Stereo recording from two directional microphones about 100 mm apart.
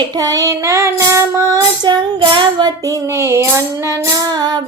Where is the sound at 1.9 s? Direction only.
50° right (ahead or behind).